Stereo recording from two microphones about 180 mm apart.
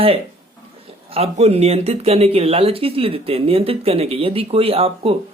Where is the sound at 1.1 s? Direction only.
35° right (ahead or behind).